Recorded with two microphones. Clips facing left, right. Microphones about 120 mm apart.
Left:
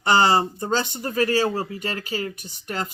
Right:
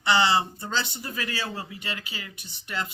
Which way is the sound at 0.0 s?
45° left (ahead or behind).